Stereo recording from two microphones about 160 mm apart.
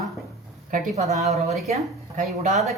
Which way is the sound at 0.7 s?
45° right (ahead or behind).